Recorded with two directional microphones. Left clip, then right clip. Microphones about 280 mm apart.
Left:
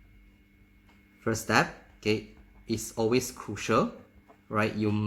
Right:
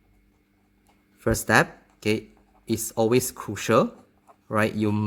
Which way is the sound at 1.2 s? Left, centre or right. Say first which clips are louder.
Right 5 dB; right.